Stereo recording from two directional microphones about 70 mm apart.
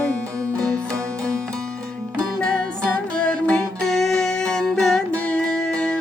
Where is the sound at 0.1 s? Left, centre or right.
Right.